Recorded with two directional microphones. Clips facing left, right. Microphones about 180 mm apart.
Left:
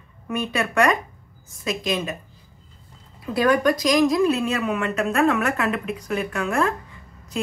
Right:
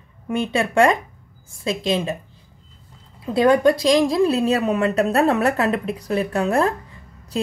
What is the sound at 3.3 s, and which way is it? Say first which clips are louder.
A woman's voice: right 4 dB; 25° right (ahead or behind).